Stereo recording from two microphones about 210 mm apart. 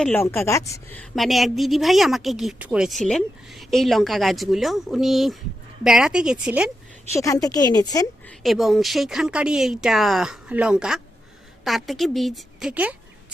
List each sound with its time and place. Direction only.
0.0 s a woman's voice: 10° left (ahead or behind); by 6.7 s 5° right (ahead or behind)
7.1 s a woman's voice: 15° left (ahead or behind)
8.4 s a woman's voice: centre (ahead or behind)